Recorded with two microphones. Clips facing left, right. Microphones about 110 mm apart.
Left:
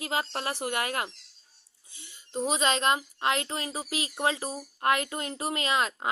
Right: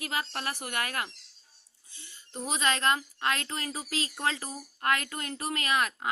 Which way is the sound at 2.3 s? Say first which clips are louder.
Left 3 dB; 20° left (ahead or behind).